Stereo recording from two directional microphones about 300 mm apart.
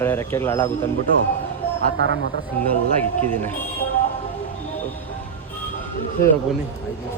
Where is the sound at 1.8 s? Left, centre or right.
Right.